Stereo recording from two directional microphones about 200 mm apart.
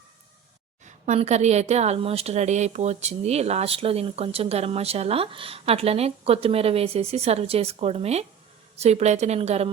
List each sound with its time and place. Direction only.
0.9 s a woman's voice: 35° right (ahead or behind)